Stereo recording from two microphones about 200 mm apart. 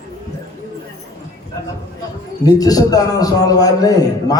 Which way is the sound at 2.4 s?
20° left (ahead or behind).